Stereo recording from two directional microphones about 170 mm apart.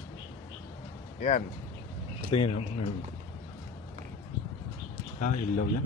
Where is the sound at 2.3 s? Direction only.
40° left (ahead or behind).